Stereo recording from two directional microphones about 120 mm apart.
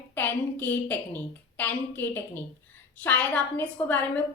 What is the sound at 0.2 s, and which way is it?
A woman's voice, 15° left (ahead or behind).